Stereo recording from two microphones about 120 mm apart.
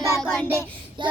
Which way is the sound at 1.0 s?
40° right (ahead or behind).